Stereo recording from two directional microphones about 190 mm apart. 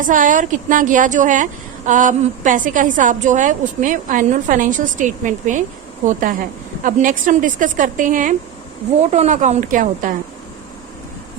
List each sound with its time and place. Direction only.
0.0 s a woman's voice: 45° right (ahead or behind)